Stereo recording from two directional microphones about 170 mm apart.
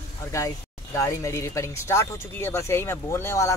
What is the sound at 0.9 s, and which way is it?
Speech, 15° left (ahead or behind).